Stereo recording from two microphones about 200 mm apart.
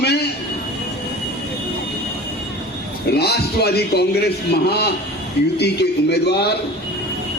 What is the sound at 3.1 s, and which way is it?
A man's voice, 55° left (ahead or behind).